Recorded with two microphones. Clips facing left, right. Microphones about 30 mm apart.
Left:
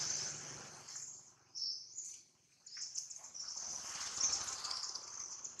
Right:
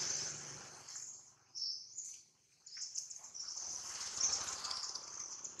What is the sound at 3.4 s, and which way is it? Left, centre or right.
Water, centre.